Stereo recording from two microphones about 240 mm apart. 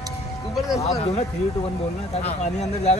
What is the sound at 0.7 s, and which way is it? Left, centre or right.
Speech, left.